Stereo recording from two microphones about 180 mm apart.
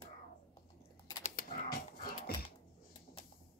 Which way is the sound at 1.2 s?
55° left (ahead or behind).